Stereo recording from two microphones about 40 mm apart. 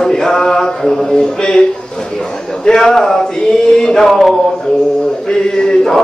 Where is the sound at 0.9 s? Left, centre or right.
Centre.